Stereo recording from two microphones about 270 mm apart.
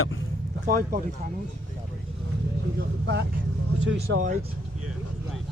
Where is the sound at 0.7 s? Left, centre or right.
Right.